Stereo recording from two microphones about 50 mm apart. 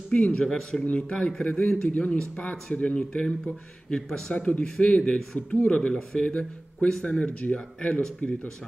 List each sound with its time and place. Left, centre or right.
0.3 s speech: centre
0.8 s a man's voice: left